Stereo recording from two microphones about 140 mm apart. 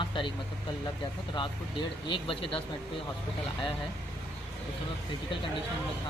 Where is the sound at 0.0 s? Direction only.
35° left (ahead or behind).